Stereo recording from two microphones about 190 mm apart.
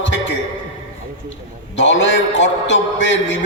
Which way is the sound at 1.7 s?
70° left (ahead or behind).